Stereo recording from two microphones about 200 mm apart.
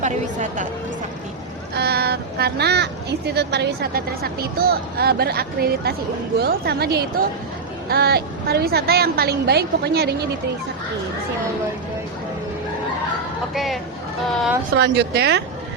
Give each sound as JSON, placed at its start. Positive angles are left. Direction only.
{"t": 0.0, "sound": "a woman's voice", "side_deg": -35}
{"t": 1.7, "sound": "speech", "side_deg": -55}
{"t": 13.5, "sound": "speech", "side_deg": 0}
{"t": 14.8, "sound": "speech", "side_deg": -55}